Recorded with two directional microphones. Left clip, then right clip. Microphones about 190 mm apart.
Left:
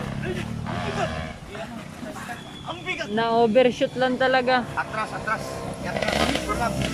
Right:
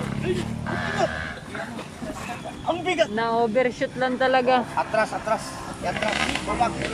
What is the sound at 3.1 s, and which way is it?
Speech, 10° left (ahead or behind).